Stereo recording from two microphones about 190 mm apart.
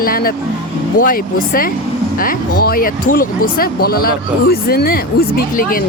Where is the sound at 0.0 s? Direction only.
50° left (ahead or behind).